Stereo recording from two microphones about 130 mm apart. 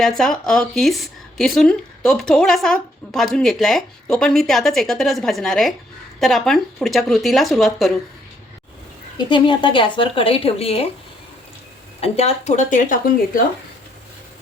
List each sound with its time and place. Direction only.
0.0 s speech: 5° left (ahead or behind)
9.1 s speech: 40° left (ahead or behind)
11.9 s speech: 50° left (ahead or behind); by 13.4 s 85° left